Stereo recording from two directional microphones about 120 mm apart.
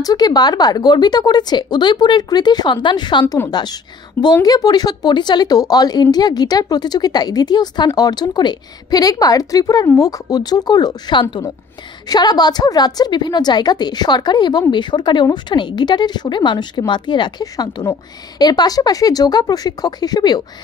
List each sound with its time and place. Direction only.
0.0 s a woman's voice: 30° left (ahead or behind)